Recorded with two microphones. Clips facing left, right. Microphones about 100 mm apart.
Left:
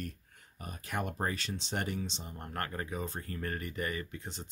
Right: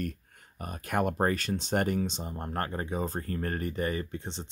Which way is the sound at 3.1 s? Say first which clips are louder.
Right 5 dB; 40° right (ahead or behind).